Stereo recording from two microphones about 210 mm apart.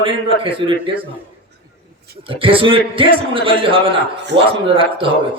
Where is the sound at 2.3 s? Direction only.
25° right (ahead or behind).